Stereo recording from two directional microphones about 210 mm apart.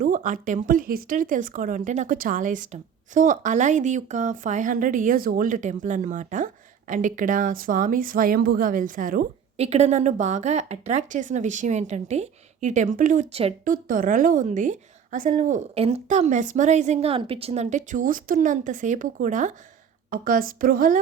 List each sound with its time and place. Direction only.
0.0 s speech: 40° right (ahead or behind)